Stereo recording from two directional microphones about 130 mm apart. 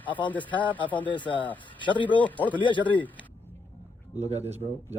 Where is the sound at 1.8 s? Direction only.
40° left (ahead or behind).